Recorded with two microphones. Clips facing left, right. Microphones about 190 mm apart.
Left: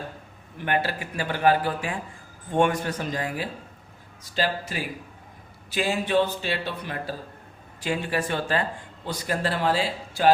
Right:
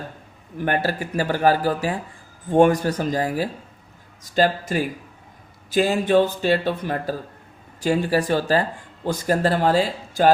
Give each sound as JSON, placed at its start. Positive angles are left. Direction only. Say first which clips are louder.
{"t": 0.6, "sound": "a man's voice", "louder": "right 4 dB", "side_deg": -40}